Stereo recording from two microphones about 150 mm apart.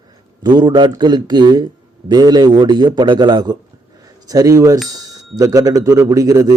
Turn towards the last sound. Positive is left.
turn(degrees=-25)  # may be behind; listen again after turning